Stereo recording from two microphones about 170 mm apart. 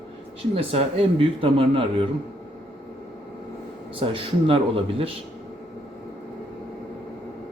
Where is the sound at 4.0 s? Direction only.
30° right (ahead or behind).